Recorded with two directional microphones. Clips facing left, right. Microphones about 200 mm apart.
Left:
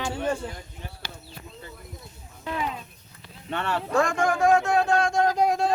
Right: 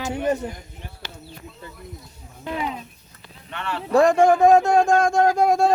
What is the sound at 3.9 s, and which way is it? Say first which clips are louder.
Speech: right 9 dB; 35° right (ahead or behind).